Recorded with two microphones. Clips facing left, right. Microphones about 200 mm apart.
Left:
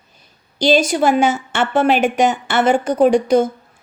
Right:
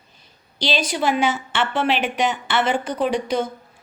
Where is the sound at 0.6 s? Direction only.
45° left (ahead or behind).